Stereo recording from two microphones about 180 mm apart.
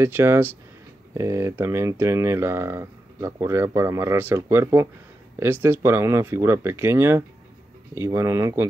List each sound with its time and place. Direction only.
0.0 s speech: 15° right (ahead or behind)